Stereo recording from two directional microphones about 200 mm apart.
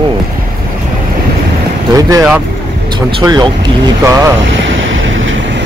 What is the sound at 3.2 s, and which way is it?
Speech, 20° right (ahead or behind).